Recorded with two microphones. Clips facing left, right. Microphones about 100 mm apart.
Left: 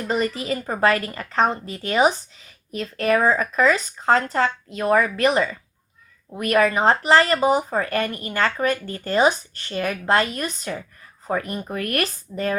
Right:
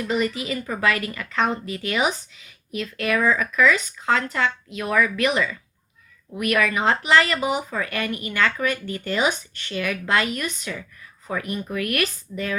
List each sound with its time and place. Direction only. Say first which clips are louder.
0.0 s a woman's voice: even; 40° left (ahead or behind)